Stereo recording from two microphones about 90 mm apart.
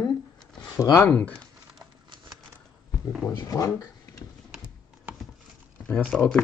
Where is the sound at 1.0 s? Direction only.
20° left (ahead or behind).